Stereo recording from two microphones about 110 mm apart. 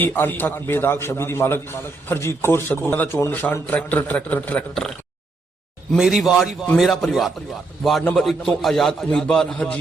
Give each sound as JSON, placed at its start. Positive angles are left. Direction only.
{"t": 0.0, "sound": "a man's voice", "side_deg": 20}
{"t": 6.0, "sound": "a man's voice", "side_deg": -5}